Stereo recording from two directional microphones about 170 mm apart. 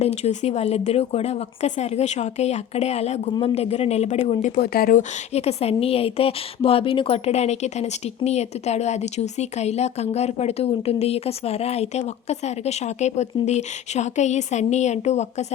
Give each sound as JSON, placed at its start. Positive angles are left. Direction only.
{"t": 0.0, "sound": "a woman's voice", "side_deg": 40}
{"t": 4.5, "sound": "speech", "side_deg": 65}
{"t": 5.3, "sound": "a woman's voice", "side_deg": 40}